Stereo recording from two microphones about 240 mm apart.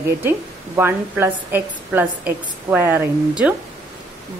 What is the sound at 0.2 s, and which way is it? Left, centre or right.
Speech, centre.